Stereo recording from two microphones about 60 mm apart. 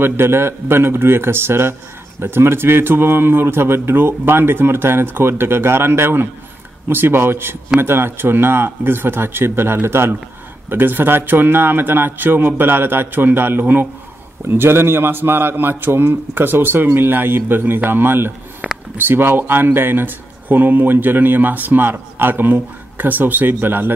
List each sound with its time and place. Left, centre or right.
0.0 s speech: right
18.6 s a sound: centre
18.9 s speech: right